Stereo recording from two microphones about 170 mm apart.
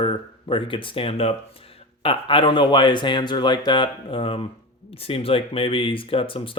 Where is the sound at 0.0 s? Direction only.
30° left (ahead or behind).